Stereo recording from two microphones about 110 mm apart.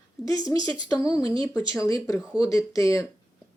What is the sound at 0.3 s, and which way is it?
Speech, 35° left (ahead or behind).